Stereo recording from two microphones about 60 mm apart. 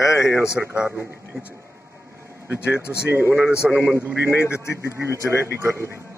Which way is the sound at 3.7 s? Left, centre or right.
Right.